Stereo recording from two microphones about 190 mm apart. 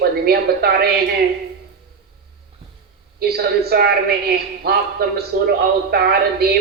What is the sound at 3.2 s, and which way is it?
A woman's voice, 55° right (ahead or behind).